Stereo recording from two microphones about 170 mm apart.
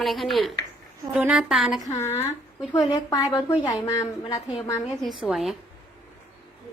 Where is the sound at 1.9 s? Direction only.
15° left (ahead or behind).